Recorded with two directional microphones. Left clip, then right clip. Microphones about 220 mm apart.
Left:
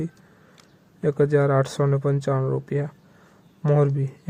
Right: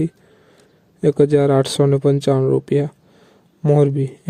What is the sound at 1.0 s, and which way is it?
Speech, 45° right (ahead or behind).